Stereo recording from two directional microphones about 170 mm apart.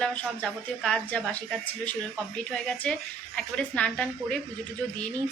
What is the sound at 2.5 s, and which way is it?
A woman's voice, 5° left (ahead or behind).